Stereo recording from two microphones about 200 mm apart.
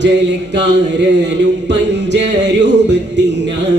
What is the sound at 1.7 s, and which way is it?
Music, 60° right (ahead or behind).